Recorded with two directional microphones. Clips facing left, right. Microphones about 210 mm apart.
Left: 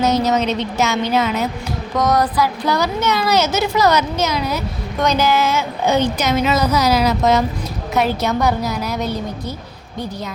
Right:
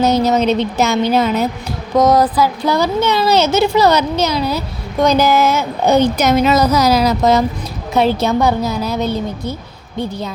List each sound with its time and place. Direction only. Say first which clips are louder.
0.0 s a woman's voice: right 3 dB; 35° right (ahead or behind)